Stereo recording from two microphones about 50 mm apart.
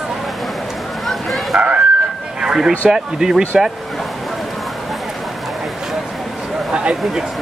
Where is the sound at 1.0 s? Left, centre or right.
Centre.